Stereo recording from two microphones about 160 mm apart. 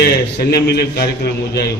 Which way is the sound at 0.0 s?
90° left.